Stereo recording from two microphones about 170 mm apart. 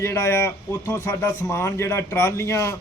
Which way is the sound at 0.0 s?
15° left (ahead or behind).